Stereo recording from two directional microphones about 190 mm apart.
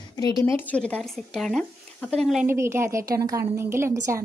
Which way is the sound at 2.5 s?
15° right (ahead or behind).